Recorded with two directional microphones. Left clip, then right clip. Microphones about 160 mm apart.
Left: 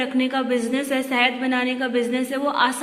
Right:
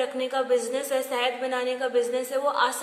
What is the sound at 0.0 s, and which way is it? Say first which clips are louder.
A woman's voice: left 3 dB; 15° left (ahead or behind).